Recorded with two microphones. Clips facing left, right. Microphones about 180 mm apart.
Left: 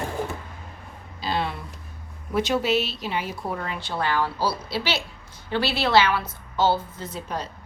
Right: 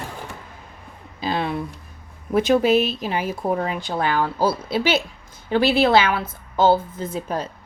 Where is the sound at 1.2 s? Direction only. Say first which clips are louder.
Right 3 dB; 50° right (ahead or behind).